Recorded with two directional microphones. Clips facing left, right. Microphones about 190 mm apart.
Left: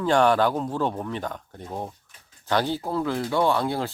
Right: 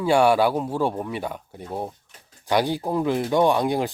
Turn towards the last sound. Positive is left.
turn(degrees=-15)  # may be behind; listen again after turning